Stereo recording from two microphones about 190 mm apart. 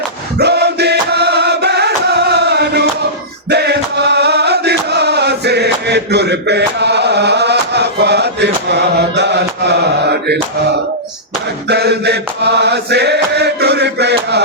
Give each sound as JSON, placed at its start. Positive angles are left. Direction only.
{"t": 0.3, "sound": "music", "side_deg": -60}
{"t": 3.5, "sound": "chant", "side_deg": -60}
{"t": 11.7, "sound": "chant", "side_deg": -60}